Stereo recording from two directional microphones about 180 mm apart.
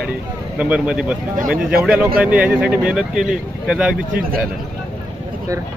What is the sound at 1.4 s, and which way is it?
Speech, 55° right (ahead or behind).